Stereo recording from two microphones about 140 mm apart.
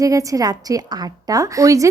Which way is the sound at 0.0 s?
25° right (ahead or behind).